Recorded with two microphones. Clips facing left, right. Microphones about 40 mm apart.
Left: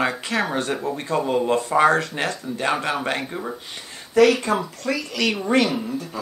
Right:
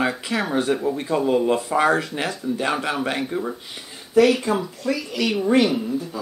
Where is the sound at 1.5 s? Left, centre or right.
Centre.